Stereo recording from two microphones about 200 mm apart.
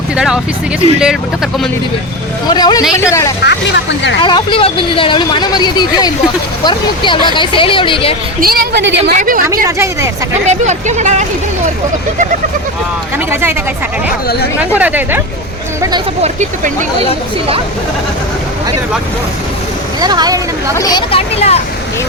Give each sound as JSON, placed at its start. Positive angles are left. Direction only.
{"t": 0.9, "sound": "speech", "side_deg": -5}
{"t": 2.5, "sound": "speech", "side_deg": 20}
{"t": 3.4, "sound": "speech", "side_deg": 60}
{"t": 4.2, "sound": "speech", "side_deg": 25}
{"t": 8.4, "sound": "a woman's voice", "side_deg": -50}
{"t": 9.0, "sound": "a woman's voice", "side_deg": -45}
{"t": 9.6, "sound": "speech", "side_deg": -15}
{"t": 10.4, "sound": "speech", "side_deg": -35}
{"t": 13.1, "sound": "speech", "side_deg": -10}
{"t": 14.8, "sound": "speech", "side_deg": -10}
{"t": 16.2, "sound": "speech", "side_deg": -35}
{"t": 20.0, "sound": "speech", "side_deg": -20}
{"t": 20.7, "sound": "speech", "side_deg": 20}